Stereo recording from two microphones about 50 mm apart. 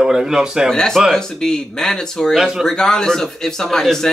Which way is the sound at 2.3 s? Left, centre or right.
Centre.